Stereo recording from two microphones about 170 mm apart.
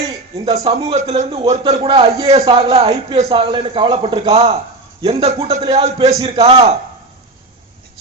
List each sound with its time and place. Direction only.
0.4 s a man's voice: 35° right (ahead or behind)